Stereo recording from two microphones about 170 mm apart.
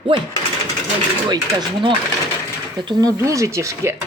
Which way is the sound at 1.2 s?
25° right (ahead or behind).